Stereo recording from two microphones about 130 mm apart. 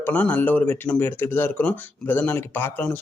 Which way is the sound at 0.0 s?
10° left (ahead or behind).